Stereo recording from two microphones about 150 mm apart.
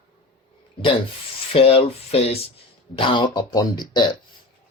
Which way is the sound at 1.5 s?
40° left (ahead or behind).